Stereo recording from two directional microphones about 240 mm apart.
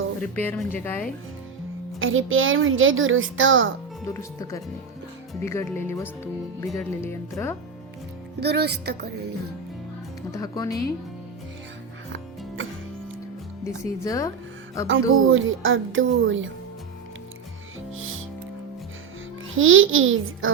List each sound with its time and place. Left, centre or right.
0.2 s a woman's voice: centre
2.0 s a woman's voice: right
4.0 s a woman's voice: centre
8.4 s speech: right
10.3 s a woman's voice: centre
10.7 s speech: left
13.7 s a woman's voice: centre
14.8 s a woman's voice: right
17.9 s music: right
19.5 s a woman's voice: right